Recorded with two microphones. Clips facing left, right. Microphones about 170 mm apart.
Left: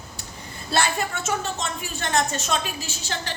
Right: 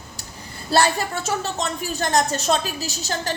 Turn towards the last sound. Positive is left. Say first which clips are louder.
# right 5 dB
turn(degrees=-40)  # may be behind; listen again after turning